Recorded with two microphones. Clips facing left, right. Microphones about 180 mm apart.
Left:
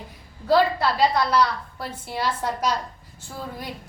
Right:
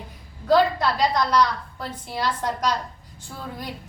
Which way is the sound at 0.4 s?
5° left (ahead or behind).